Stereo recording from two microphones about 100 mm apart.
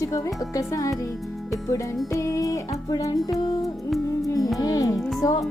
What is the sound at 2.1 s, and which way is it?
Music, 35° left (ahead or behind).